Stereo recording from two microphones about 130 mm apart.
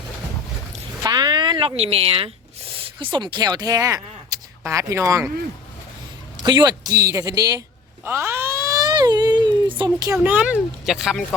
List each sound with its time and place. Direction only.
1.0 s speech: 30° right (ahead or behind)
6.4 s speech: 35° right (ahead or behind)
8.0 s a sound: 20° right (ahead or behind); by 10.1 s 40° right (ahead or behind)
10.2 s speech: 10° right (ahead or behind)